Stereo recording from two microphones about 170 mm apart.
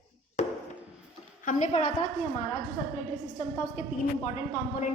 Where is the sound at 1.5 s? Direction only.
45° left (ahead or behind).